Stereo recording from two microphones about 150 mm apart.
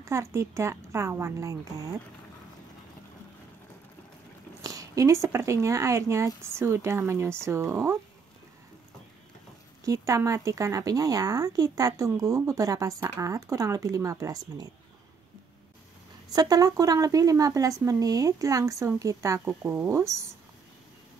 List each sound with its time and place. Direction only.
0.0 s speech: 20° right (ahead or behind)
4.6 s speech: 20° right (ahead or behind)
9.8 s speech: 20° right (ahead or behind)
16.3 s speech: 25° right (ahead or behind)